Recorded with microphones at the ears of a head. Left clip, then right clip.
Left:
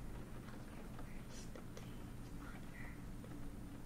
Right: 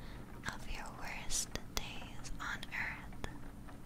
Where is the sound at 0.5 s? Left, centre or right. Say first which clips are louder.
Right 10 dB; right.